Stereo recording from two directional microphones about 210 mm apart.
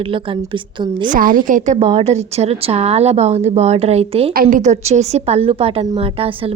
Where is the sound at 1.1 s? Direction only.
40° right (ahead or behind).